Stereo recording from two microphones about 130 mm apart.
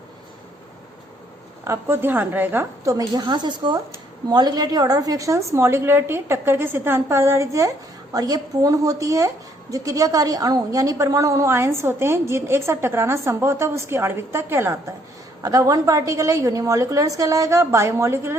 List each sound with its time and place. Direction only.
1.6 s speech: 20° right (ahead or behind)